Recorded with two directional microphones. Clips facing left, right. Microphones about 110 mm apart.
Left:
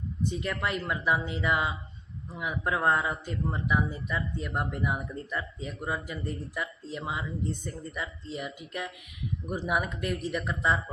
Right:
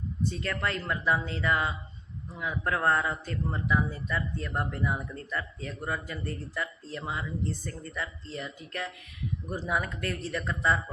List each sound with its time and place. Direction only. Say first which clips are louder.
0.3 s speech: left 1 dB; 15° left (ahead or behind)